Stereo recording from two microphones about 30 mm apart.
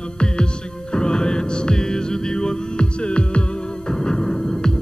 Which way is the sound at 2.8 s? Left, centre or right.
Left.